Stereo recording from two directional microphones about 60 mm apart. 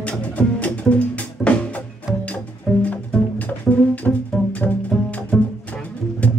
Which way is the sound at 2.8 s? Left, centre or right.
Left.